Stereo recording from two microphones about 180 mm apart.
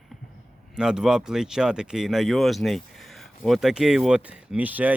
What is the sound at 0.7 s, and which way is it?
Speech, 5° right (ahead or behind).